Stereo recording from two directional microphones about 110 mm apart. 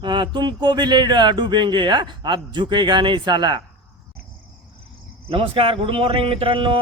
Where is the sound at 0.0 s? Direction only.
45° right (ahead or behind).